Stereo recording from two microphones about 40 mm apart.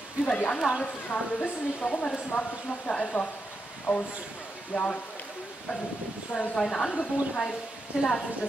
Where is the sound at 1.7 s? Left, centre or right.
Left.